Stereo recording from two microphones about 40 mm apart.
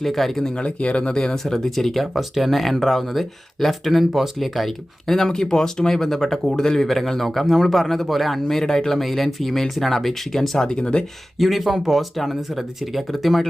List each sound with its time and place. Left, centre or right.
0.0 s speech: centre
0.4 s speech: left; by 10.7 s centre
10.7 s speech: left
11.3 s speech: centre